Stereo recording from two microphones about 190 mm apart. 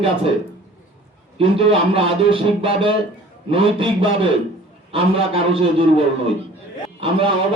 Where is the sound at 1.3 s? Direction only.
30° right (ahead or behind).